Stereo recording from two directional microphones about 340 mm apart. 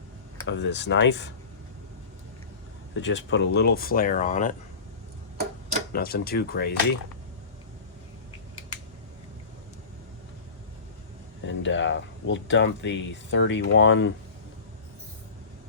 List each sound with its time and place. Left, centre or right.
0.4 s speech: left
2.9 s speech: left
5.9 s speech: left
11.4 s speech: left